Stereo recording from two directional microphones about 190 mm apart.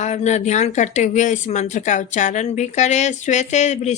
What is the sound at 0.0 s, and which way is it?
Speech, 35° left (ahead or behind).